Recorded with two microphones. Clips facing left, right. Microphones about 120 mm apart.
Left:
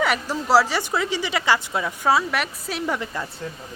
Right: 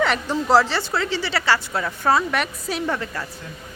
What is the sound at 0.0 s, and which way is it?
A woman's voice, 5° left (ahead or behind).